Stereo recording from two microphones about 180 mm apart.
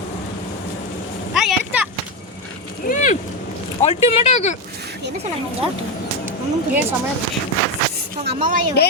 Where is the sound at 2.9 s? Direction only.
45° left (ahead or behind).